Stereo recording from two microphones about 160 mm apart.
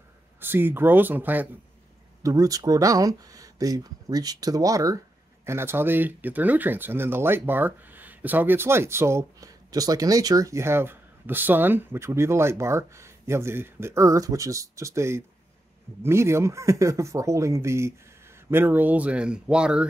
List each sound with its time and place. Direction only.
0.4 s speech: 15° right (ahead or behind)
2.2 s speech: 20° right (ahead or behind); by 19.9 s 5° right (ahead or behind)